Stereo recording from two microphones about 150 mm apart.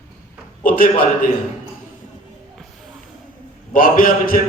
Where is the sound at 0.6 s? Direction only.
70° left (ahead or behind).